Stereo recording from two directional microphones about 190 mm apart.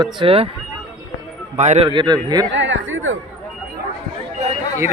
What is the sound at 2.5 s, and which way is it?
Speech, 75° right (ahead or behind).